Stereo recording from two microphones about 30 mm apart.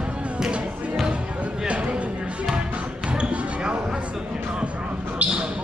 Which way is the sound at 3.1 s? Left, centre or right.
Right.